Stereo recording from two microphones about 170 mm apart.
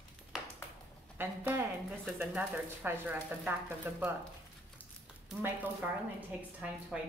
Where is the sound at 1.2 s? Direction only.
10° right (ahead or behind).